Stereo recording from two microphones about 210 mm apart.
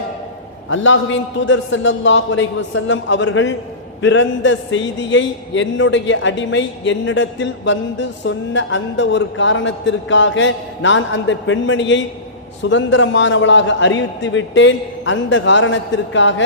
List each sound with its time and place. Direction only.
0.7 s a man's voice: 65° left (ahead or behind)